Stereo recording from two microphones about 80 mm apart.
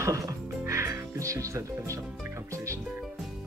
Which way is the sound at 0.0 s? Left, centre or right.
Right.